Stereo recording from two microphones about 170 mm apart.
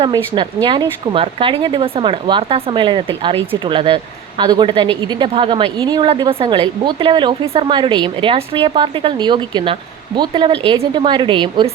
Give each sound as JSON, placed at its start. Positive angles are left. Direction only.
{"t": 0.0, "sound": "a woman's voice", "side_deg": -30}